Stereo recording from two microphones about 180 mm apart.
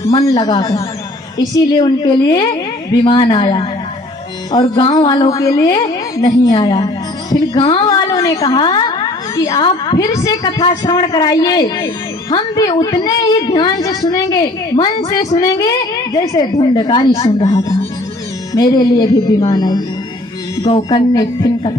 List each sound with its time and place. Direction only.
0.0 s a woman's voice: 20° left (ahead or behind)
20.7 s a sound: 35° left (ahead or behind)
21.1 s a woman's voice: 25° left (ahead or behind)